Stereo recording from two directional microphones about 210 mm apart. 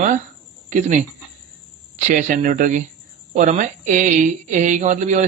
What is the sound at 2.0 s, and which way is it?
Speech, 35° right (ahead or behind).